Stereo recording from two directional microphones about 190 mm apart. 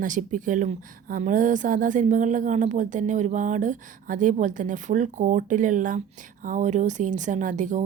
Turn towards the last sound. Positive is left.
turn(degrees=-40)  # may be behind; listen again after turning